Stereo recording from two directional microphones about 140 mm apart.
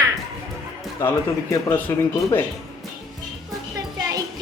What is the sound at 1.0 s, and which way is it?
Speech, 20° left (ahead or behind).